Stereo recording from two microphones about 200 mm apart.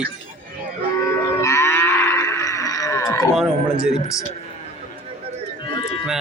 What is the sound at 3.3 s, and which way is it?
Speech, 5° right (ahead or behind).